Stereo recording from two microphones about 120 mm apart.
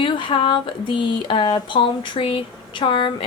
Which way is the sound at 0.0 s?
45° left (ahead or behind).